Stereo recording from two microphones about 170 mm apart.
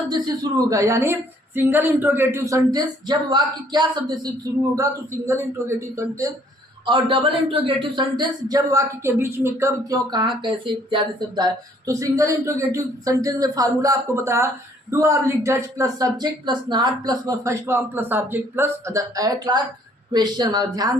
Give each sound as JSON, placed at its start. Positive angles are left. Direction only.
{"t": 0.1, "sound": "a woman's voice", "side_deg": -20}
{"t": 5.2, "sound": "a woman's voice", "side_deg": -15}
{"t": 6.8, "sound": "speech", "side_deg": -30}